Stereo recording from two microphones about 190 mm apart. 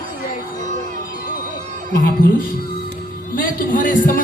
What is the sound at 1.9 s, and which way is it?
Speech, 50° left (ahead or behind).